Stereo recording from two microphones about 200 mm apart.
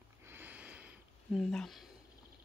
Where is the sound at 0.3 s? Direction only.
10° right (ahead or behind).